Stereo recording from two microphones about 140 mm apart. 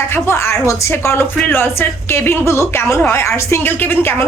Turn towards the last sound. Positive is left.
turn(degrees=15)  # may be behind; listen again after turning